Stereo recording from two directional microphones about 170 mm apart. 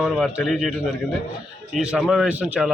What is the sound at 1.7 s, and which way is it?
Speech, 5° right (ahead or behind).